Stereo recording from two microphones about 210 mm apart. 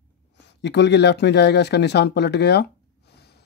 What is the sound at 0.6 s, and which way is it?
Speech, 55° left (ahead or behind).